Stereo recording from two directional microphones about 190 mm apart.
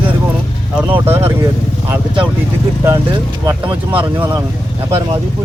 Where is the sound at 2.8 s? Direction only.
15° right (ahead or behind).